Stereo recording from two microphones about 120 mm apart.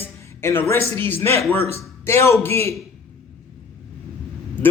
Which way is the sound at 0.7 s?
20° left (ahead or behind).